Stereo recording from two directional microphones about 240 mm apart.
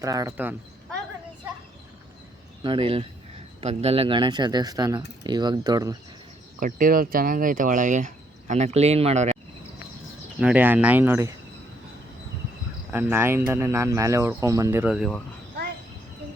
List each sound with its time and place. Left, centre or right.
0.0 s speech: centre
2.6 s speech: right
6.6 s speech: right
10.4 s speech: centre
12.9 s speech: centre